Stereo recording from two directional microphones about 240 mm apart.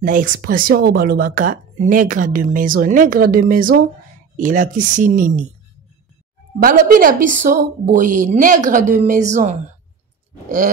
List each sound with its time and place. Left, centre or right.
0.0 s speech: right
6.6 s a woman's voice: right